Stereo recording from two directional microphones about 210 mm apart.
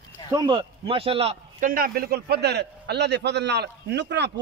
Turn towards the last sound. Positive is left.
turn(degrees=-55)  # may be behind; listen again after turning